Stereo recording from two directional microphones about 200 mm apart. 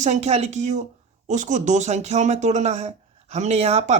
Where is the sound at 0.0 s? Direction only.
35° right (ahead or behind).